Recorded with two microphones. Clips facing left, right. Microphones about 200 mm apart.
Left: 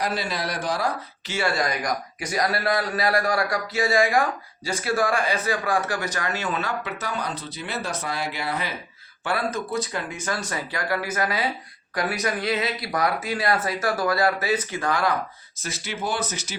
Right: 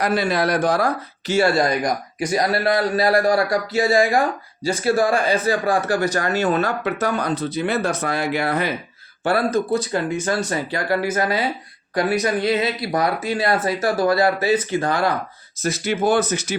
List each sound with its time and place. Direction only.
0.0 s speech: 55° right (ahead or behind)
1.4 s speech: 30° right (ahead or behind); by 8.7 s 55° right (ahead or behind)
9.2 s speech: 35° right (ahead or behind)
15.6 s speech: 50° right (ahead or behind)